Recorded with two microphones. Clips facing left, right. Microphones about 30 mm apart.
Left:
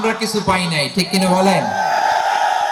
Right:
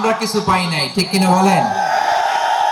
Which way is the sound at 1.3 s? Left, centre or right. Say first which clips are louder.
Right 2 dB; left.